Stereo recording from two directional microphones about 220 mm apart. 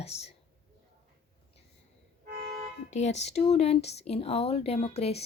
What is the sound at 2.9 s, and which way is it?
A woman's voice, 30° left (ahead or behind).